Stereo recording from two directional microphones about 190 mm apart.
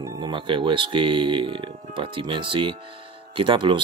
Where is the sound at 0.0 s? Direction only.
25° right (ahead or behind).